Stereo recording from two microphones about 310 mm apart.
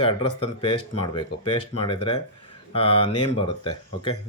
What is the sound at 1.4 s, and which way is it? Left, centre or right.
Speech, left.